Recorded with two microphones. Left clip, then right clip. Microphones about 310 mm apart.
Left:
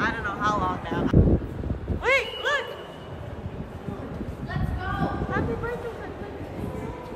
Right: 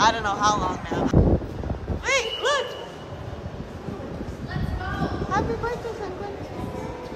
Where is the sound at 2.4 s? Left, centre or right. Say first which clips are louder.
Right 3 dB; centre.